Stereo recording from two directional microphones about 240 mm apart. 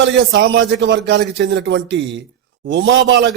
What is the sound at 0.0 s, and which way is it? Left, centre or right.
Speech, right.